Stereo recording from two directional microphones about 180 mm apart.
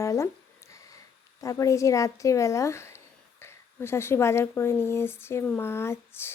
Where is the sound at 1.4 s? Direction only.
15° left (ahead or behind).